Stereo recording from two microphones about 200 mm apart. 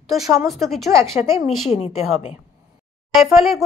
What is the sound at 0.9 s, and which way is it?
Speech, 15° right (ahead or behind).